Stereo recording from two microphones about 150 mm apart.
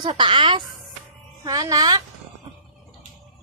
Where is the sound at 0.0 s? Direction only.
35° right (ahead or behind).